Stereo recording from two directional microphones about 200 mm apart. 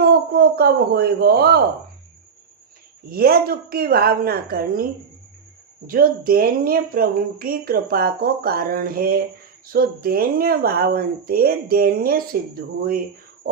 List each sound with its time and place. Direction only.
0.1 s speech: 50° right (ahead or behind)
3.1 s speech: 50° right (ahead or behind)